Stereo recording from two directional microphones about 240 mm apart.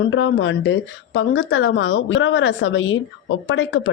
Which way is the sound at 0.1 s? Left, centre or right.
Left.